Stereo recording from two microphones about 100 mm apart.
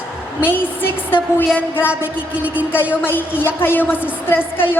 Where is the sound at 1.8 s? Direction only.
15° right (ahead or behind).